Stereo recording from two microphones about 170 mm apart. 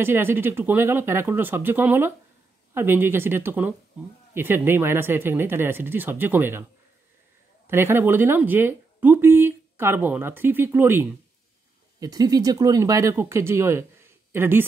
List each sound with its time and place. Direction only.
0.0 s speech: 15° right (ahead or behind)
7.6 s speech: 15° right (ahead or behind)